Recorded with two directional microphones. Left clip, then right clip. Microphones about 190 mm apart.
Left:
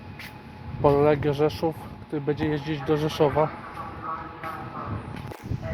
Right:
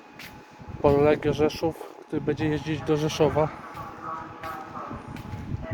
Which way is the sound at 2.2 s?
30° right (ahead or behind).